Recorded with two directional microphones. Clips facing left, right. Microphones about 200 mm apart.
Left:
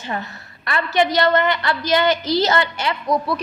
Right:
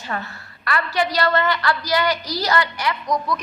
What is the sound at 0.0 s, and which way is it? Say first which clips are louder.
A woman's voice: left 2 dB; 20° left (ahead or behind).